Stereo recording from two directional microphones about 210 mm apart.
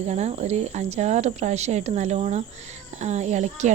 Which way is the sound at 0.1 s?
30° right (ahead or behind).